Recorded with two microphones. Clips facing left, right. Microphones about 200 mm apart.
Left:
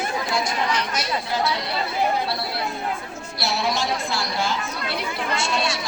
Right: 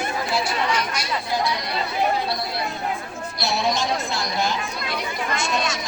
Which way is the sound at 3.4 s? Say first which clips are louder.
Right 1 dB; 15° right (ahead or behind).